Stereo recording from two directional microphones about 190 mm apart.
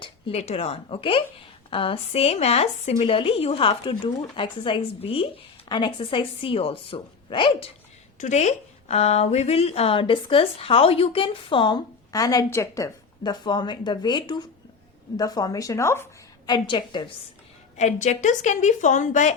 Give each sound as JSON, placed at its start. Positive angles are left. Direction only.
{"t": 0.0, "sound": "a woman's voice", "side_deg": 35}
{"t": 8.2, "sound": "a woman's voice", "side_deg": 35}
{"t": 17.7, "sound": "a woman's voice", "side_deg": 40}